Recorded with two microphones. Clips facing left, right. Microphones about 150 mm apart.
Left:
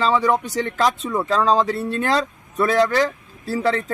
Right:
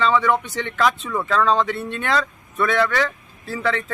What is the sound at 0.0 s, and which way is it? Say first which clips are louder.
Speech: even; 35° left (ahead or behind).